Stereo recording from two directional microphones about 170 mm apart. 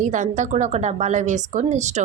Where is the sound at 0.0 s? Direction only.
45° right (ahead or behind).